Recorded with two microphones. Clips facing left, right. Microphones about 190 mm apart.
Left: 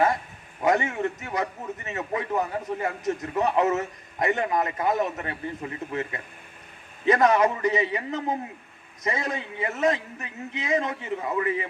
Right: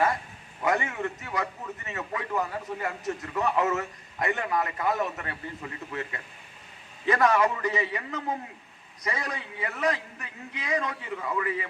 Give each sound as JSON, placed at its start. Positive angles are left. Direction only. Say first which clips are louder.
{"t": 0.6, "sound": "a man's voice", "louder": "left 4 dB", "side_deg": 20}